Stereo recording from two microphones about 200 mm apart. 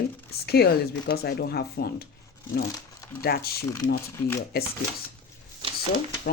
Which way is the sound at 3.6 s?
15° left (ahead or behind).